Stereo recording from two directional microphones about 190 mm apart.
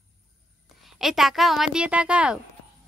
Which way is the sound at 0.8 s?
Centre (ahead or behind).